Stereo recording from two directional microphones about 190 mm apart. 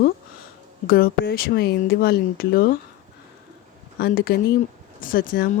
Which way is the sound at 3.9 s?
55° left (ahead or behind).